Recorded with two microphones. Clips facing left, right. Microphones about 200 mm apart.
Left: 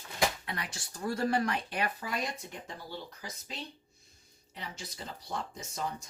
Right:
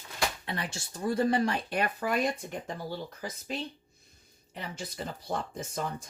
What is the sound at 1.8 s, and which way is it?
Speech, 55° right (ahead or behind).